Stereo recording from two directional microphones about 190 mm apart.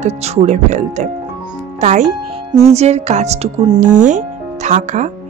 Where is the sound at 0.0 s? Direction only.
35° right (ahead or behind).